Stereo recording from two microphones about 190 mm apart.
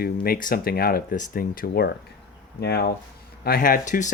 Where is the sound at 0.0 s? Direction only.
50° left (ahead or behind).